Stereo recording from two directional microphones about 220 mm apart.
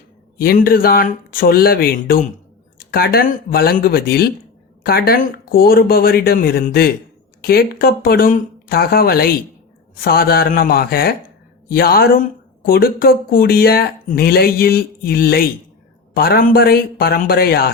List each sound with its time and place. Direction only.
0.3 s speech: 40° left (ahead or behind)